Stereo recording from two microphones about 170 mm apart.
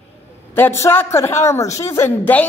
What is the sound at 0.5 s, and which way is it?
Speech, 15° left (ahead or behind).